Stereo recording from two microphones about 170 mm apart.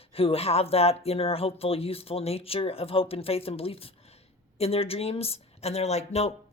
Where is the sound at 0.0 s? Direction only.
35° left (ahead or behind).